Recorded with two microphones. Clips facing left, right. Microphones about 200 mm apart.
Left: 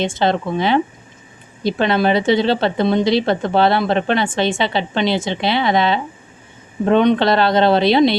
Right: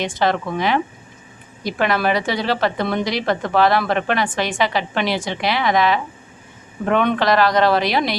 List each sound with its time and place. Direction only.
0.0 s a woman's voice: 25° left (ahead or behind)